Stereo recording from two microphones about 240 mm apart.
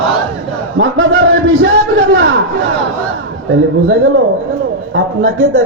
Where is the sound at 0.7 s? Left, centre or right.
Right.